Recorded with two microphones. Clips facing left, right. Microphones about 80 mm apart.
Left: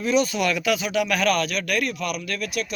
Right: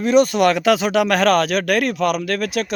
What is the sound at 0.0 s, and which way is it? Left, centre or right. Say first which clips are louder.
Speech: right 7 dB; right.